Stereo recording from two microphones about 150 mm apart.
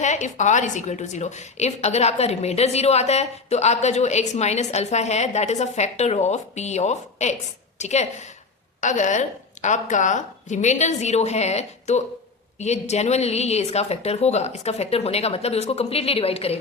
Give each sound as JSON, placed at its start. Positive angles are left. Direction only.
{"t": 0.0, "sound": "a woman's voice", "side_deg": 55}